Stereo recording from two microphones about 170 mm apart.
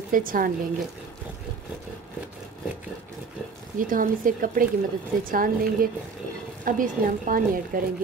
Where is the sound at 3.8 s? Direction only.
55° right (ahead or behind).